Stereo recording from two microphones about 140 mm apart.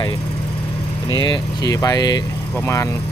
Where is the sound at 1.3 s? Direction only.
30° left (ahead or behind).